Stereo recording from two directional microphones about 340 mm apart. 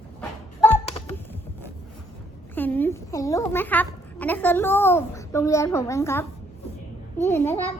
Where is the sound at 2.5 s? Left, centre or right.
Centre.